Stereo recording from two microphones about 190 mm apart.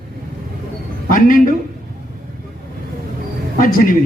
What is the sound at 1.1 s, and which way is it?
Speech, 45° left (ahead or behind).